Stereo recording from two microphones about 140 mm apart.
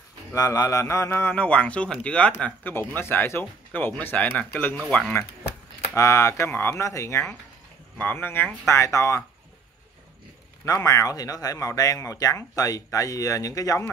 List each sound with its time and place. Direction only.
0.3 s a man's voice: 25° left (ahead or behind); by 5.1 s 5° left (ahead or behind)
5.9 s a man's voice: 20° left (ahead or behind)
10.6 s speech: 25° left (ahead or behind)